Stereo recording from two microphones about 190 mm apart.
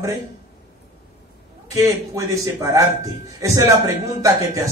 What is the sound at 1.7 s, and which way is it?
A man's voice, 15° right (ahead or behind).